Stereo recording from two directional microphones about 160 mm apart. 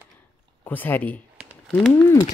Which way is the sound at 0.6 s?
10° left (ahead or behind).